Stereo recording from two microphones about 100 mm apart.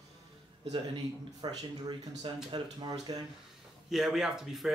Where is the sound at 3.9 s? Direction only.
5° right (ahead or behind).